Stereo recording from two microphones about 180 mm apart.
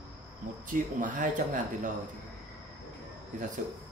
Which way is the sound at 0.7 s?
45° right (ahead or behind).